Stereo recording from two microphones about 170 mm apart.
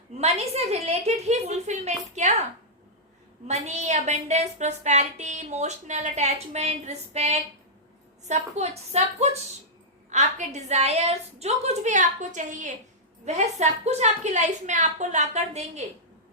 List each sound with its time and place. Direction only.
0.1 s a woman's voice: 40° right (ahead or behind)